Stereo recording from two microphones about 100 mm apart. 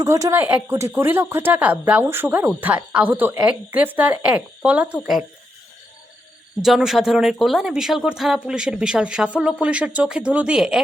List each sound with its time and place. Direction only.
0.0 s speech: 35° right (ahead or behind)
0.3 s speech: 15° right (ahead or behind)
4.9 s speech: centre (ahead or behind)
6.6 s speech: 5° right (ahead or behind)